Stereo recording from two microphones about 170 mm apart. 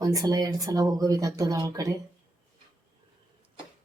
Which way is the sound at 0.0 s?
20° right (ahead or behind).